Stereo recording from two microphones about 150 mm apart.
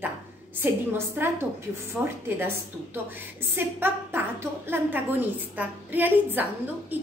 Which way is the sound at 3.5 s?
15° right (ahead or behind).